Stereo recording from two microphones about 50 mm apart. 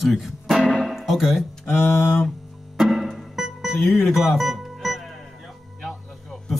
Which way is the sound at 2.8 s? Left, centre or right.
Centre.